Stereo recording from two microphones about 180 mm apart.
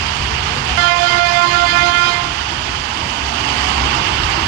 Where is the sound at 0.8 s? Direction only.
70° right (ahead or behind).